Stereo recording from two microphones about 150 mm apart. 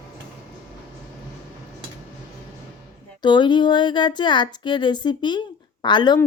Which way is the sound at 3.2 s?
30° left (ahead or behind).